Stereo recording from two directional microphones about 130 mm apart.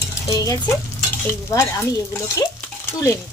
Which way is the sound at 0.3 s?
25° left (ahead or behind).